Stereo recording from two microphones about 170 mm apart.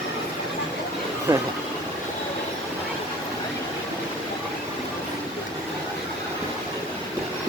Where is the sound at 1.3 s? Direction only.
15° right (ahead or behind).